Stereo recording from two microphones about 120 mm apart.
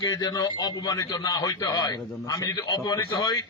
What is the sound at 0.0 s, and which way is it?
A man's voice, 35° left (ahead or behind).